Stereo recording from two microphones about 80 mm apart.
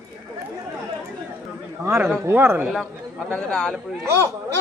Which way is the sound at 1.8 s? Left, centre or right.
Right.